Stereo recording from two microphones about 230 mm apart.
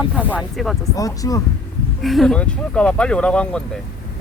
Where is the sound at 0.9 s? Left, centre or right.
Centre.